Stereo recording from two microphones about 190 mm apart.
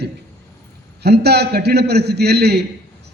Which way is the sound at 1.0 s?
60° right (ahead or behind).